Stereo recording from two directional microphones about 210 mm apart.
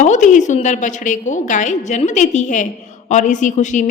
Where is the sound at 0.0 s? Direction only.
35° left (ahead or behind).